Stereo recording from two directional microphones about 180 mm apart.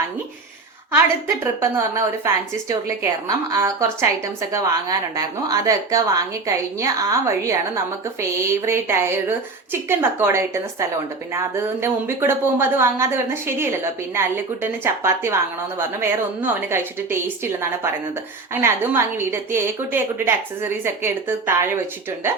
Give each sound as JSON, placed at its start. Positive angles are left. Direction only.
{"t": 1.6, "sound": "a woman's voice", "side_deg": -15}